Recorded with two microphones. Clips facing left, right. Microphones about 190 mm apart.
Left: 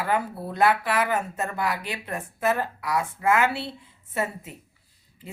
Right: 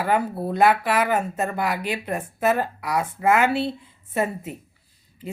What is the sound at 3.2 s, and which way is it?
Speech, 50° right (ahead or behind).